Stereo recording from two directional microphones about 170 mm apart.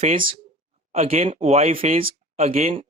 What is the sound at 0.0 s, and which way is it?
Speech, 40° right (ahead or behind).